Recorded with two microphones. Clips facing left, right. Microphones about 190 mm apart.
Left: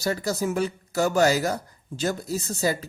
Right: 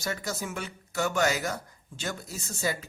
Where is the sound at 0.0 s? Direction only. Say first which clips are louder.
Left 8 dB; 35° left (ahead or behind).